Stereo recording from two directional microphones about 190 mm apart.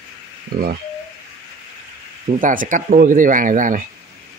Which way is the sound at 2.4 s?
45° right (ahead or behind).